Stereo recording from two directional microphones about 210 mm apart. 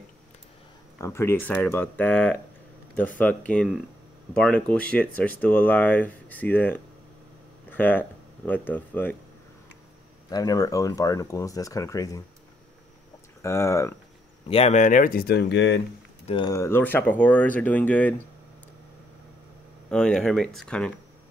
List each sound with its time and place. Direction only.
0.9 s speech: 10° left (ahead or behind)
10.3 s speech: 15° left (ahead or behind)
13.4 s speech: 15° left (ahead or behind)
14.5 s speech: 30° left (ahead or behind); by 15.8 s 55° left (ahead or behind)
16.3 s speech: 20° left (ahead or behind)
19.9 s speech: 5° left (ahead or behind)